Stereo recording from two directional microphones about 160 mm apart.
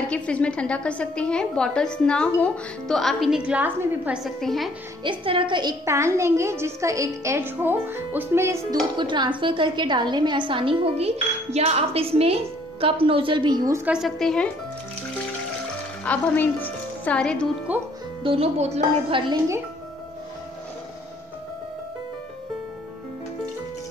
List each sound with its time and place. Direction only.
0.1 s a woman's voice: 5° left (ahead or behind)
5.0 s a woman's voice: 30° right (ahead or behind); by 8.7 s 15° right (ahead or behind)
8.9 s a woman's voice: 30° right (ahead or behind)
13.9 s a woman's voice: centre (ahead or behind)
16.0 s speech: 10° left (ahead or behind)
17.7 s a woman's voice: 10° right (ahead or behind)
18.2 s a woman's voice: 35° right (ahead or behind)